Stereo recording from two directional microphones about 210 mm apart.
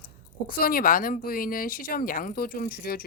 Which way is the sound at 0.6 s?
45° left (ahead or behind).